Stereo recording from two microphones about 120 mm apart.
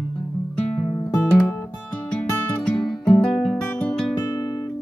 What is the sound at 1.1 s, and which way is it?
Guitar, 20° left (ahead or behind).